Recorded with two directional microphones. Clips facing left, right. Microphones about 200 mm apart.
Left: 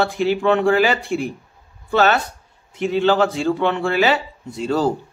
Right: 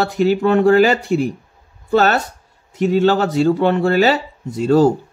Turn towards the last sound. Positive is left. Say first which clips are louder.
# right 7 dB
turn(degrees=-45)  # may be behind; listen again after turning